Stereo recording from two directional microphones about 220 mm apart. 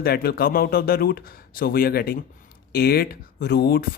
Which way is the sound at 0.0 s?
45° left (ahead or behind).